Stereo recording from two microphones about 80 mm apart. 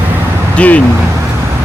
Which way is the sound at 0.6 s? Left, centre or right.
Centre.